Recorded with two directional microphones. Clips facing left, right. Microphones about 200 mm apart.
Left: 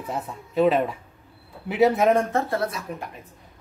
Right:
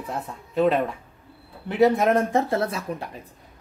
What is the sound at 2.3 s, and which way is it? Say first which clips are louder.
Speech: right 2 dB; 15° right (ahead or behind).